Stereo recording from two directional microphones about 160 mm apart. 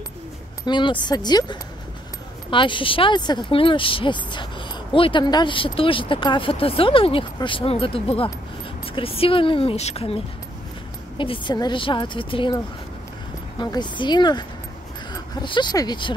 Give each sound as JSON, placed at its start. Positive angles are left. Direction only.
{"t": 0.7, "sound": "speech", "side_deg": 30}
{"t": 15.4, "sound": "speech", "side_deg": 30}